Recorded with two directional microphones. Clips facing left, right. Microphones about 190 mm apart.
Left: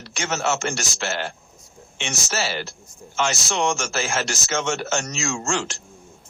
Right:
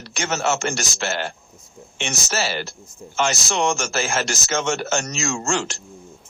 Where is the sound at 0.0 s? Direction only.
40° right (ahead or behind).